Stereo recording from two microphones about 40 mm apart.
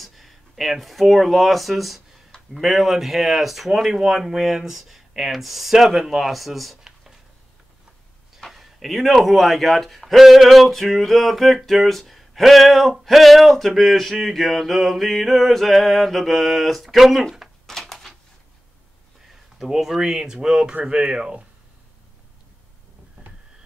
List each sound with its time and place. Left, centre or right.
0.0 s speech: centre
8.4 s speech: centre
17.6 s a sound: centre
19.7 s speech: centre